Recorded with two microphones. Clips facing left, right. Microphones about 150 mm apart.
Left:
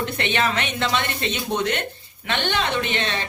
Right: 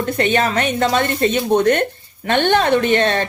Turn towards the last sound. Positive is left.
turn(degrees=-50)  # may be behind; listen again after turning